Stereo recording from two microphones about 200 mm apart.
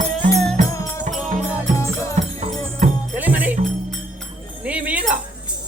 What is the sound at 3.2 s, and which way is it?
Music, 10° right (ahead or behind).